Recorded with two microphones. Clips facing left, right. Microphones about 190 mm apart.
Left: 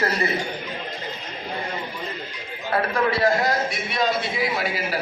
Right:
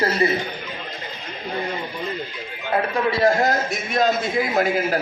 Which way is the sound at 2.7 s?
20° right (ahead or behind).